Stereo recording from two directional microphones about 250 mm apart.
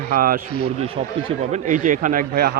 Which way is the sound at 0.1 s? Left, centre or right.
Right.